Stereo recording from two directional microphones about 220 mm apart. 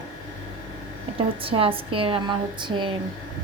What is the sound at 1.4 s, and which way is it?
A woman's voice, 25° right (ahead or behind).